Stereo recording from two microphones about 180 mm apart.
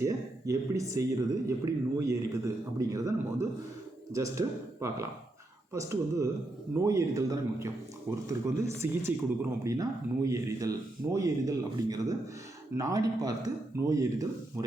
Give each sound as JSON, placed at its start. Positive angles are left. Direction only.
{"t": 0.0, "sound": "speech", "side_deg": -15}